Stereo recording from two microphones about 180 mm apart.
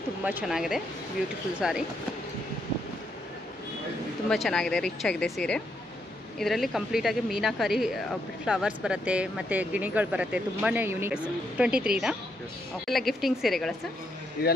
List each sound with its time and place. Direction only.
0.2 s a woman's voice: 10° right (ahead or behind)
4.3 s a woman's voice: 5° left (ahead or behind)
14.4 s speech: 55° left (ahead or behind)